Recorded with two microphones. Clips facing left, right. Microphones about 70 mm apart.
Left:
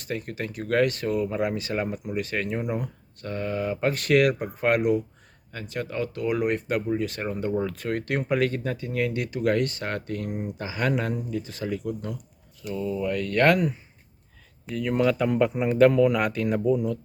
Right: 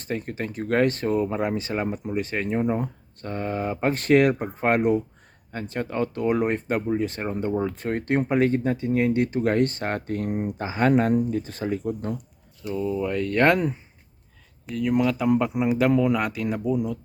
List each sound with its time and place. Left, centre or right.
0.0 s speech: right
12.7 s speech: right
14.7 s speech: centre
15.9 s speech: centre
16.1 s speech: centre